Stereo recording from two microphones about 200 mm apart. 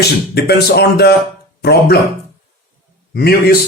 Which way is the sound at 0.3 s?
55° left (ahead or behind).